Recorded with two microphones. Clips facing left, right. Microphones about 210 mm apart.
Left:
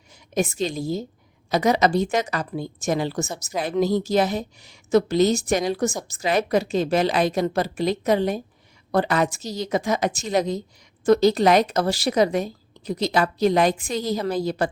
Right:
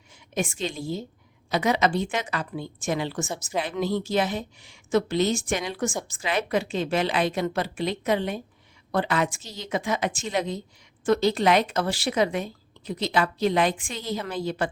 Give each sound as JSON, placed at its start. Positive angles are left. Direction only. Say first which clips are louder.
{"t": 0.3, "sound": "a woman's voice", "louder": "left 5 dB", "side_deg": 40}